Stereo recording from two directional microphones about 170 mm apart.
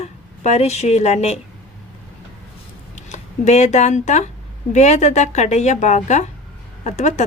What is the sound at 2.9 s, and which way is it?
A woman's voice, 45° left (ahead or behind).